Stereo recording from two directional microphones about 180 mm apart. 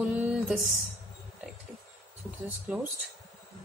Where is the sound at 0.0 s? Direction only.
5° right (ahead or behind).